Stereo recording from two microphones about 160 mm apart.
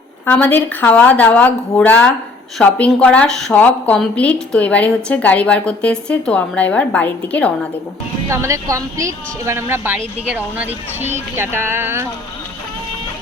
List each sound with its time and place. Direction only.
0.3 s a woman's voice: 10° left (ahead or behind)
8.3 s a woman's voice: 20° right (ahead or behind)